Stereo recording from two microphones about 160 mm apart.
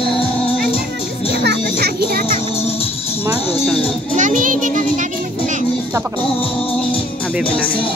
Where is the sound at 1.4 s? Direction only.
85° right.